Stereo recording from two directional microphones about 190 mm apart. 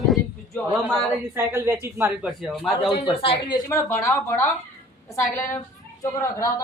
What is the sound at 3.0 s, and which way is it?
A woman's voice, 30° left (ahead or behind).